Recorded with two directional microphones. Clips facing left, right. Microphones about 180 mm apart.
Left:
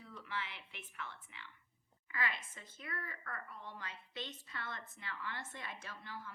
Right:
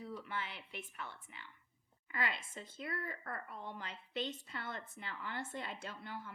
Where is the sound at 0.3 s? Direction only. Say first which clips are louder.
Right 2 dB; 40° right (ahead or behind).